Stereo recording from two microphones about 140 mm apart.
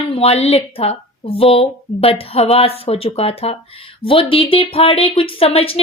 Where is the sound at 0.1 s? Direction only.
45° left (ahead or behind).